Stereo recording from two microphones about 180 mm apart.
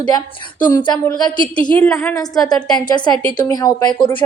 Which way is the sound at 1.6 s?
5° left (ahead or behind).